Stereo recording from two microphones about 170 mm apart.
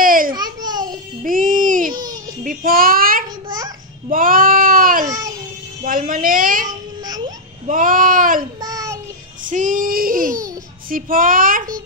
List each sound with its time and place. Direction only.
0.0 s babbling: 55° right (ahead or behind)
0.3 s babbling: 25° right (ahead or behind)
1.2 s music: 55° right (ahead or behind)
2.4 s child singing: 60° right (ahead or behind)
3.4 s babbling: 20° right (ahead or behind)
4.1 s a sound: 55° right (ahead or behind)
5.0 s babbling: 20° right (ahead or behind)
5.9 s a woman's voice: 55° right (ahead or behind)
6.7 s a sound: 25° right (ahead or behind)
7.6 s a sound: 50° right (ahead or behind)
8.5 s child singing: 20° right (ahead or behind)
9.4 s child singing: 50° right (ahead or behind)